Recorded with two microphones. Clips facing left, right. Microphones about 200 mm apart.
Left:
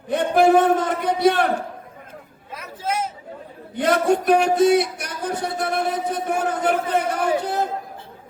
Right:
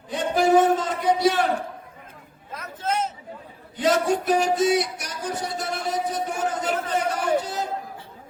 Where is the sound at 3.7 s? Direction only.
60° left (ahead or behind).